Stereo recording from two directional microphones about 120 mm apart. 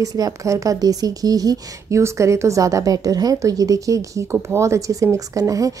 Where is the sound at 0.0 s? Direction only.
30° right (ahead or behind).